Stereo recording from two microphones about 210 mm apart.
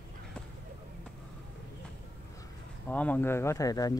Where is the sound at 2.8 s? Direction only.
5° left (ahead or behind).